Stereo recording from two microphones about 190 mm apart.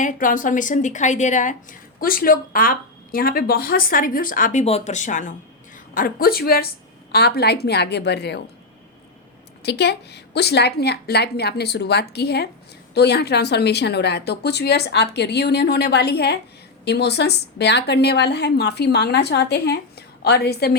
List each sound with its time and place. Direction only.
0.0 s a woman's voice: 45° left (ahead or behind)
4.6 s a woman's voice: 35° left (ahead or behind); by 8.4 s 60° left (ahead or behind)
9.6 s a woman's voice: 60° left (ahead or behind)